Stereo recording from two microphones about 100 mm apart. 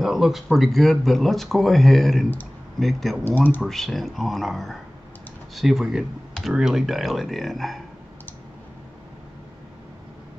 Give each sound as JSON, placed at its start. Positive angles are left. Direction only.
{"t": 0.0, "sound": "speech", "side_deg": -5}
{"t": 3.3, "sound": "speech", "side_deg": 20}
{"t": 3.6, "sound": "speech", "side_deg": 0}